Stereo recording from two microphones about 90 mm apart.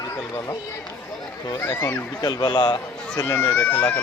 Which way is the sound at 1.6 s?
20° left (ahead or behind).